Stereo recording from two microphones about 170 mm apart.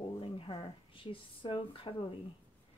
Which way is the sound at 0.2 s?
30° left (ahead or behind).